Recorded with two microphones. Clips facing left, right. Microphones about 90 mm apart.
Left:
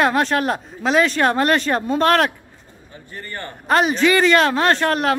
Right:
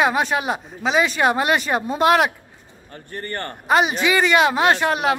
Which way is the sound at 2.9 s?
50° right (ahead or behind).